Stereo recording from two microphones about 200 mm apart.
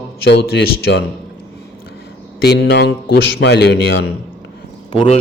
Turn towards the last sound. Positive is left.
turn(degrees=25)  # may be behind; listen again after turning